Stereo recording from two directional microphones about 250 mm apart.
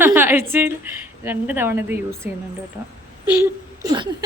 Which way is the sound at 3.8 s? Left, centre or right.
Centre.